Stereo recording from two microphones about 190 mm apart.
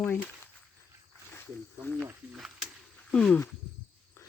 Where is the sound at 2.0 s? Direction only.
5° right (ahead or behind).